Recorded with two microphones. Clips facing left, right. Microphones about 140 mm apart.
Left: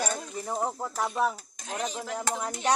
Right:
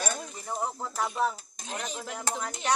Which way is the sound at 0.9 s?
10° left (ahead or behind).